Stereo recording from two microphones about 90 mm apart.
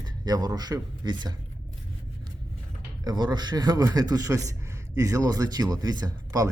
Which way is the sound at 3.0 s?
55° right (ahead or behind).